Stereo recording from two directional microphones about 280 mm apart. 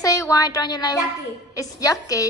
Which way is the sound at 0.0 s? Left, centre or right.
Centre.